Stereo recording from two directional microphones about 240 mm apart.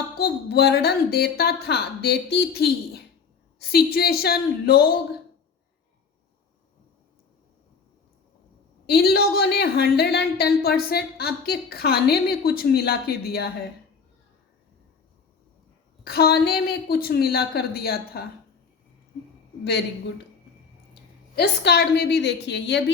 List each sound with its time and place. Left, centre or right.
0.2 s a woman's voice: left
8.9 s a woman's voice: left
16.0 s a woman's voice: left
21.3 s a woman's voice: left